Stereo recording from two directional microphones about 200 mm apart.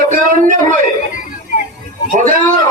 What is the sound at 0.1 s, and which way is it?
Speech, 40° right (ahead or behind).